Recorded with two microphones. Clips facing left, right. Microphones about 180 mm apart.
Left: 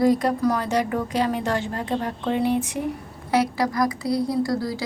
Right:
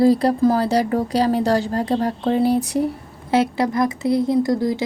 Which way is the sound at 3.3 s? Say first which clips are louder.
Right 3 dB; 25° right (ahead or behind).